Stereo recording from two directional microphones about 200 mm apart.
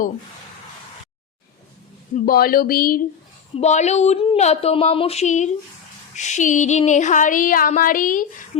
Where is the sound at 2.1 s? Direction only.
45° left (ahead or behind).